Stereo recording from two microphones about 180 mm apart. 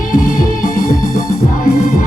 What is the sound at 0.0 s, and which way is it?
Music, 50° left (ahead or behind).